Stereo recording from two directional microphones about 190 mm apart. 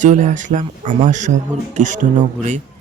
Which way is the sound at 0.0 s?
40° right (ahead or behind).